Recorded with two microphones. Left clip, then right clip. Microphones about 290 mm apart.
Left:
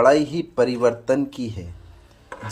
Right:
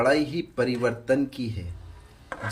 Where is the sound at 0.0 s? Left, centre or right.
Centre.